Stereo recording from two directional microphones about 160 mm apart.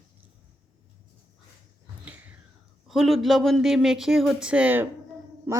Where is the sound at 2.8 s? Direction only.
Centre (ahead or behind).